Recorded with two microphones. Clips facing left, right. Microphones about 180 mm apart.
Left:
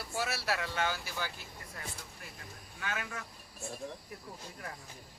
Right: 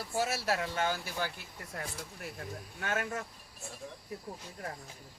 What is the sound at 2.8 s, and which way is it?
Speech, 45° right (ahead or behind).